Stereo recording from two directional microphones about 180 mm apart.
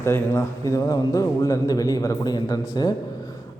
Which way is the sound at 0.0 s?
15° left (ahead or behind).